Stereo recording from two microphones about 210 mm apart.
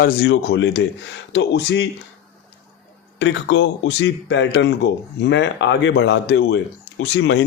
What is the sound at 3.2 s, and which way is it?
Speech, 60° left (ahead or behind).